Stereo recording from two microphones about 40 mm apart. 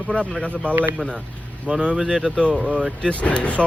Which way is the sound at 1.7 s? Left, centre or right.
Right.